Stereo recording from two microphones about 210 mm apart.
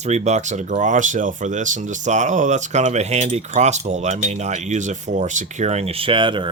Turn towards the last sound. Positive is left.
turn(degrees=-25)  # may be behind; listen again after turning